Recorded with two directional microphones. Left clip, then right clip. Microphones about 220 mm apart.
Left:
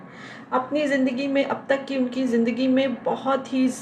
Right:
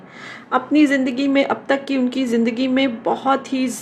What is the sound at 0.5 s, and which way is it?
Speech, 50° right (ahead or behind).